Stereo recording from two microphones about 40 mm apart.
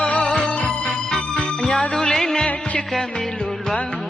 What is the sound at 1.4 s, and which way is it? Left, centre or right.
Music, left.